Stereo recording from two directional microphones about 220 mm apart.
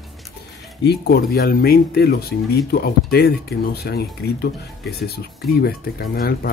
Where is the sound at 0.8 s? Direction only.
45° left (ahead or behind).